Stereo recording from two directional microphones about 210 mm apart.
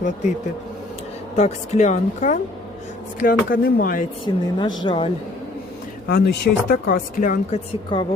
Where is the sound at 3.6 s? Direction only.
45° left (ahead or behind).